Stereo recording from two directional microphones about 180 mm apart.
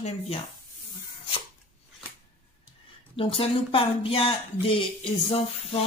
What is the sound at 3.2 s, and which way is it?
Speech, 30° left (ahead or behind).